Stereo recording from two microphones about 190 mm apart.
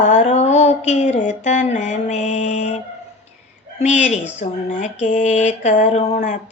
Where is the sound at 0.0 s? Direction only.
40° left (ahead or behind).